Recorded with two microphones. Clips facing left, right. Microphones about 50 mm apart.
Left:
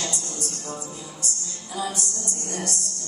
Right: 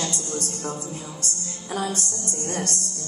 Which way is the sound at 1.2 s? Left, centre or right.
Right.